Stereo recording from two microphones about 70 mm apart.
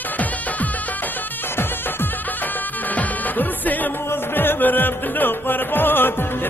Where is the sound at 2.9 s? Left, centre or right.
Left.